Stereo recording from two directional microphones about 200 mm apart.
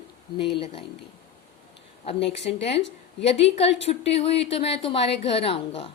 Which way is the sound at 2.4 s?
30° left (ahead or behind).